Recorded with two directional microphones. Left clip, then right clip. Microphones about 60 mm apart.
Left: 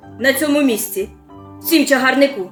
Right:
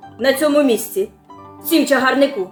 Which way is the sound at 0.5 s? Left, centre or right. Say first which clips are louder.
Right 2 dB; centre.